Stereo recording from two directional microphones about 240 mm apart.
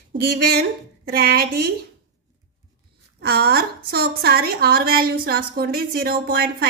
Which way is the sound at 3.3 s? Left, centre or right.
Right.